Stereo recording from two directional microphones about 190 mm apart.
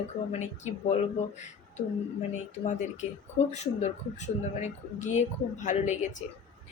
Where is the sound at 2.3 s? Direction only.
40° left (ahead or behind).